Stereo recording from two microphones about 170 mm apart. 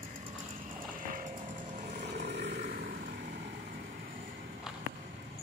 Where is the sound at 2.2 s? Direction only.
90° right.